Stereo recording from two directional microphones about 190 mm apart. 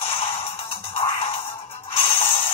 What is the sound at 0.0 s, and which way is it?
Music, 30° left (ahead or behind).